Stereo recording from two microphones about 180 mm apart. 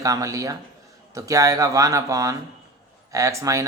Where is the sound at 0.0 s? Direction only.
20° right (ahead or behind).